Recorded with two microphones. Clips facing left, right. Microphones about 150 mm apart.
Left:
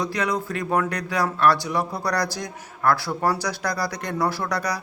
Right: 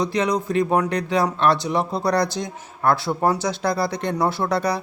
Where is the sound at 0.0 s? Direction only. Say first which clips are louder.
Right 4 dB; 20° right (ahead or behind).